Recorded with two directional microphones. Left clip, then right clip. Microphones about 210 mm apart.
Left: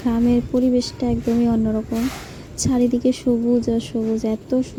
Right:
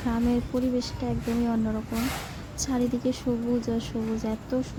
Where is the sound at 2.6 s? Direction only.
20° left (ahead or behind).